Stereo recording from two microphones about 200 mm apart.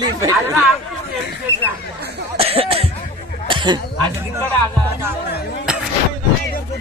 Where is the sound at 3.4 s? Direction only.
25° right (ahead or behind).